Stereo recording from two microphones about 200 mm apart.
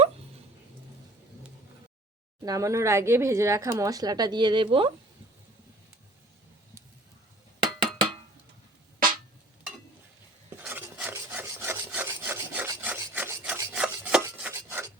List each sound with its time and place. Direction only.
2.4 s speech: 15° right (ahead or behind)
7.6 s a sound: 20° right (ahead or behind)
10.6 s rub: 10° right (ahead or behind)